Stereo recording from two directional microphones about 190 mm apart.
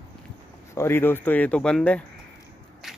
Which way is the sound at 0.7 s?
15° left (ahead or behind).